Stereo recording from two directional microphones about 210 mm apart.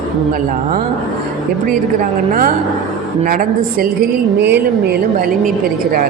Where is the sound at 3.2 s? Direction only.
40° right (ahead or behind).